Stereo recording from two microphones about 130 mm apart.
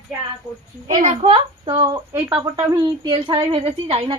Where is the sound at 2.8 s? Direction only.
40° right (ahead or behind).